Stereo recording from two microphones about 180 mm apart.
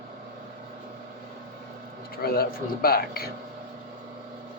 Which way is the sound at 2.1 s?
60° left (ahead or behind).